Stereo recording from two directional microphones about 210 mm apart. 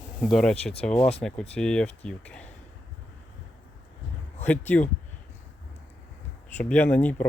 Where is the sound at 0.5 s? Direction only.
30° left (ahead or behind).